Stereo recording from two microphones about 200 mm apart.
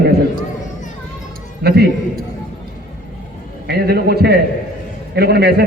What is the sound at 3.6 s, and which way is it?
A man's voice, 55° right (ahead or behind).